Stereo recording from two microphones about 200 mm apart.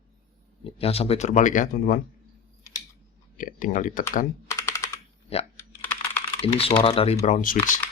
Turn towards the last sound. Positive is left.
turn(degrees=40)  # may be behind; listen again after turning